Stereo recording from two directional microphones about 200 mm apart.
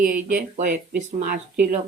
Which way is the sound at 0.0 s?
40° right (ahead or behind).